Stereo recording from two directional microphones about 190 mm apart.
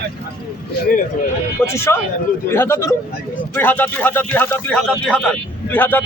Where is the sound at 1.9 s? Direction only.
15° left (ahead or behind).